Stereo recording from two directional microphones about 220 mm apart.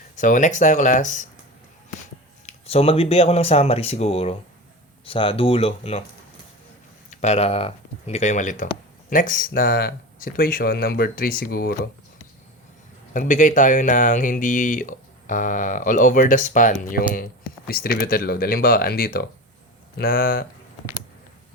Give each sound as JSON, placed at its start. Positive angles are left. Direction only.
{"t": 0.2, "sound": "speech", "side_deg": 35}
{"t": 2.5, "sound": "speech", "side_deg": 25}
{"t": 7.1, "sound": "speech", "side_deg": 30}
{"t": 13.1, "sound": "speech", "side_deg": 35}